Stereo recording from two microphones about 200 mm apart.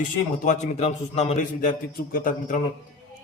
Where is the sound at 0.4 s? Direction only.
35° left (ahead or behind).